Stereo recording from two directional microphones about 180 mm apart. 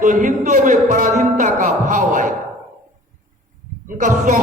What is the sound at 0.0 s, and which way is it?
A man's voice, 45° right (ahead or behind).